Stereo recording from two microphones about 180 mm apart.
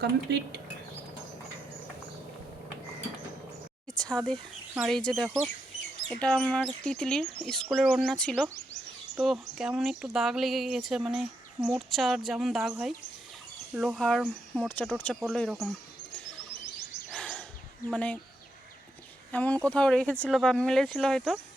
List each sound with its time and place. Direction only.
0.0 s speech: 70° right (ahead or behind)
4.0 s speech: 5° left (ahead or behind)
17.1 s a sound: centre (ahead or behind)
17.9 s speech: 10° left (ahead or behind)
19.3 s speech: 10° left (ahead or behind)